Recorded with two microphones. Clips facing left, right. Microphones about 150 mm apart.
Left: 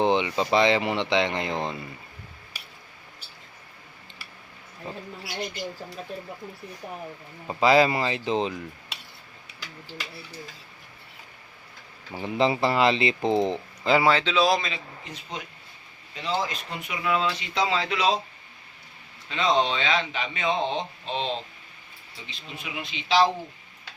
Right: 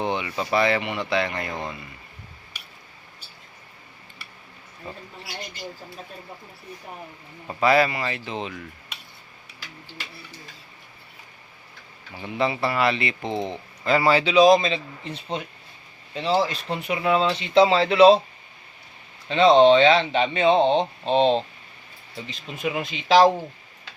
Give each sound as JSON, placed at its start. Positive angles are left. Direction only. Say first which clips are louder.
{"t": 0.0, "sound": "a sound", "louder": "left 4 dB", "side_deg": 25}
{"t": 0.3, "sound": "speech", "louder": "left 1 dB", "side_deg": 20}
{"t": 0.8, "sound": "speech", "louder": "left 1 dB", "side_deg": 30}
{"t": 7.4, "sound": "speech", "louder": "even", "side_deg": 20}
{"t": 12.1, "sound": "speech", "louder": "left 2 dB", "side_deg": 30}
{"t": 13.8, "sound": "speech", "louder": "even", "side_deg": 15}
{"t": 14.1, "sound": "speech", "louder": "right 6 dB", "side_deg": -10}
{"t": 19.3, "sound": "speech", "louder": "right 10 dB", "side_deg": -30}
{"t": 22.3, "sound": "speech", "louder": "right 10 dB", "side_deg": -45}